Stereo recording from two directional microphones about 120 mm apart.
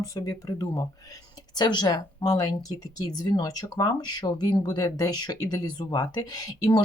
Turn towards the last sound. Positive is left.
turn(degrees=30)  # may be behind; listen again after turning